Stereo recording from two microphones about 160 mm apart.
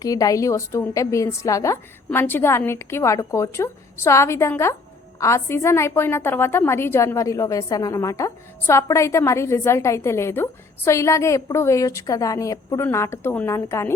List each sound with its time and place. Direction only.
0.0 s a woman's voice: 20° left (ahead or behind)